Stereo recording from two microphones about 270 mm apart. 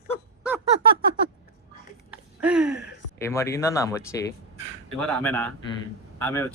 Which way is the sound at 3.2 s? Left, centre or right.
Centre.